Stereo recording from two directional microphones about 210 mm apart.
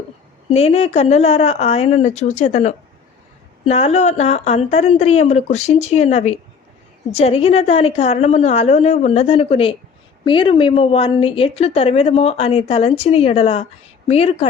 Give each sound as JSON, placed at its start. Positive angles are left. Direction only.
{"t": 0.5, "sound": "a woman's voice", "side_deg": 30}